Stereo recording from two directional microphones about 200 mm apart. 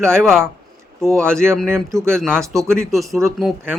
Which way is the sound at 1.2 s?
10° right (ahead or behind).